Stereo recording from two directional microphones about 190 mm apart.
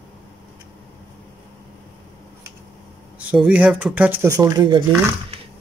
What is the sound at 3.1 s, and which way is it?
Speech, 5° right (ahead or behind).